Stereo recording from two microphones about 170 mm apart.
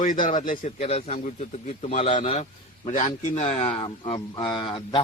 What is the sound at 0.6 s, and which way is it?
A man's voice, 35° left (ahead or behind).